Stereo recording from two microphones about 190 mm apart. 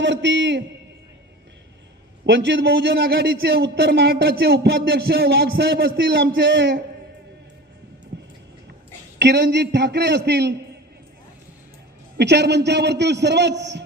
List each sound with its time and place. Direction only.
0.0 s a man's voice: 70° right (ahead or behind)
2.2 s speech: 70° right (ahead or behind)
8.1 s vehicle: 65° right (ahead or behind)
9.1 s speech: 65° right (ahead or behind)
12.1 s speech: 60° right (ahead or behind)